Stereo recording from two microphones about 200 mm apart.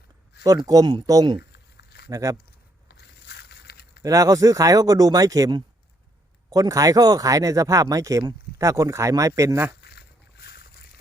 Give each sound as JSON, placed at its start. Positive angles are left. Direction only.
{"t": 0.4, "sound": "speech", "side_deg": -20}
{"t": 2.9, "sound": "a sound", "side_deg": 55}
{"t": 4.0, "sound": "speech", "side_deg": -15}
{"t": 9.8, "sound": "boat", "side_deg": 55}